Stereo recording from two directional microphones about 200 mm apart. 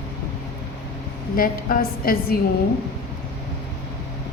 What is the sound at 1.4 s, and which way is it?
Speech, 45° left (ahead or behind).